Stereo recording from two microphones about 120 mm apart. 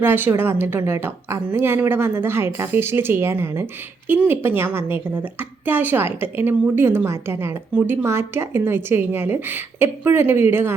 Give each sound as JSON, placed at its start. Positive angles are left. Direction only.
{"t": 0.0, "sound": "a woman's voice", "side_deg": -15}